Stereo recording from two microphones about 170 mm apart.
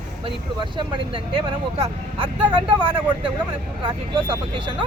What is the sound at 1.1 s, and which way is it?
Speech, 30° right (ahead or behind).